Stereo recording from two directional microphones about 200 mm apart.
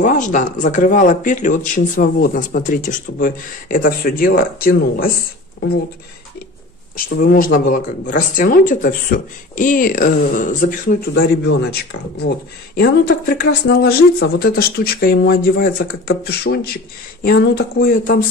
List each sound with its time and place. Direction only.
0.0 s speech: 40° left (ahead or behind)
7.2 s speech: 45° left (ahead or behind)